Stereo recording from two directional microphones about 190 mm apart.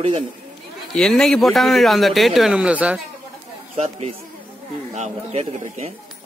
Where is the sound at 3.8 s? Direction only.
35° right (ahead or behind).